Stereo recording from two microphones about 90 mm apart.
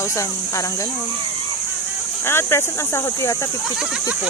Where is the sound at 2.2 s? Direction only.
30° left (ahead or behind).